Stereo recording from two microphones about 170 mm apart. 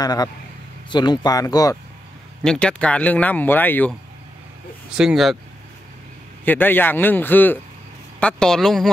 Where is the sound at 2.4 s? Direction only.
5° left (ahead or behind).